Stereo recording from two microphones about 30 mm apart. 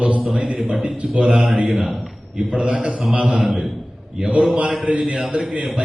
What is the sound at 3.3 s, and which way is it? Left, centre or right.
Speech, centre.